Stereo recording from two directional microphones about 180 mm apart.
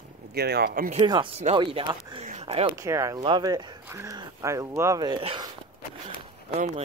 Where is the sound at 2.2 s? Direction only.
35° right (ahead or behind).